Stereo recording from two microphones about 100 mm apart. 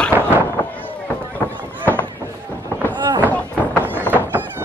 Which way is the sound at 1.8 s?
20° left (ahead or behind).